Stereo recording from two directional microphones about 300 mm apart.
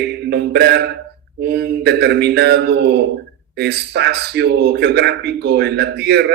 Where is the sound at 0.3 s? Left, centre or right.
Right.